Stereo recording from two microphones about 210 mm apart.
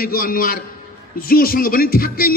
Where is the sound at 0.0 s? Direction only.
45° left (ahead or behind).